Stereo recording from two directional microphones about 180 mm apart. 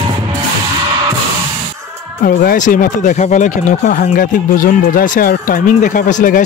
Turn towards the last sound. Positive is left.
turn(degrees=45)  # may be behind; listen again after turning